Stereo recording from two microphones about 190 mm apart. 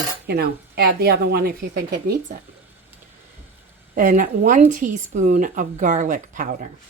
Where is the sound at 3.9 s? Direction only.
45° right (ahead or behind).